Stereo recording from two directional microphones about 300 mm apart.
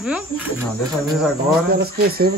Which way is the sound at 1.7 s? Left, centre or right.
Right.